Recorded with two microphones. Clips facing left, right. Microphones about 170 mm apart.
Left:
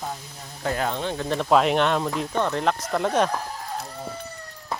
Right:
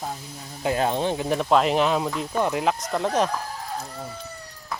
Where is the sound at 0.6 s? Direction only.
20° right (ahead or behind).